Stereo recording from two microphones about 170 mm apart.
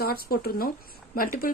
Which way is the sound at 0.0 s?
60° left (ahead or behind).